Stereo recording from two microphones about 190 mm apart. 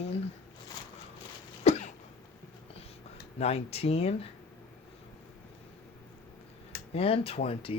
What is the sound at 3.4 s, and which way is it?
Speech, 35° left (ahead or behind).